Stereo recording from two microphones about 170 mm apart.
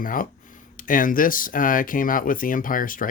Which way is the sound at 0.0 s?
55° left (ahead or behind).